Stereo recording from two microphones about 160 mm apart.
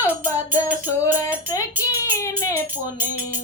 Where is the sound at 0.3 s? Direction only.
20° left (ahead or behind).